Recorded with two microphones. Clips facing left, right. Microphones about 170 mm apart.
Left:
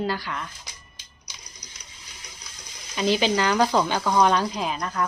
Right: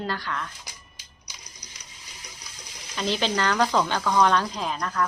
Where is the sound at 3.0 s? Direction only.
10° left (ahead or behind).